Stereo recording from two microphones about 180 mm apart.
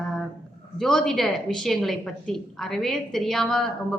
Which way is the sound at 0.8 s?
5° left (ahead or behind).